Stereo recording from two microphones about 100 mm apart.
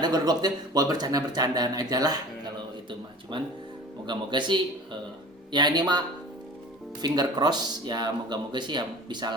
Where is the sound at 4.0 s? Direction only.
50° right (ahead or behind).